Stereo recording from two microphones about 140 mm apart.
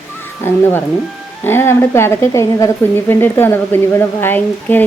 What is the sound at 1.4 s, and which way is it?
Speech, 15° left (ahead or behind).